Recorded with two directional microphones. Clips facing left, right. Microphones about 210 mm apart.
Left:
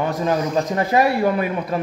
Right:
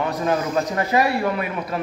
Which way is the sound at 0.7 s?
35° left (ahead or behind).